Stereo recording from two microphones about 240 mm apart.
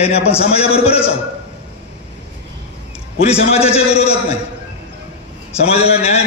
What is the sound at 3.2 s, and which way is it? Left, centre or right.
Speech, left.